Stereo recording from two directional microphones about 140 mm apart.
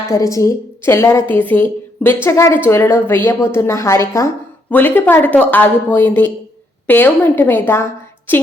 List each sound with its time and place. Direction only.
0.1 s speech: 25° left (ahead or behind)